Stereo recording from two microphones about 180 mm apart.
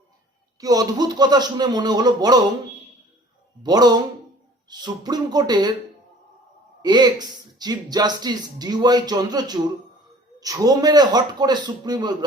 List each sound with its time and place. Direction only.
0.6 s speech: 20° right (ahead or behind)
3.6 s speech: 20° right (ahead or behind)
6.8 s speech: 25° right (ahead or behind)